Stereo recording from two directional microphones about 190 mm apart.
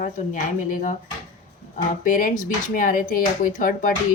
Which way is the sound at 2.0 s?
45° left (ahead or behind).